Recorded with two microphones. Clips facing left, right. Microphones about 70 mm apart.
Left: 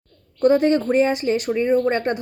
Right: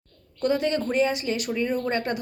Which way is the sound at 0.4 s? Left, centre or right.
Left.